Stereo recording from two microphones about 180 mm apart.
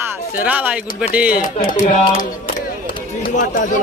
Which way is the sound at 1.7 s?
50° left (ahead or behind).